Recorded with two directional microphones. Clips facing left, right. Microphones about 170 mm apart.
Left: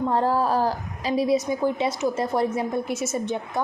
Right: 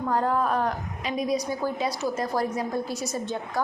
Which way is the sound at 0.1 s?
30° left (ahead or behind).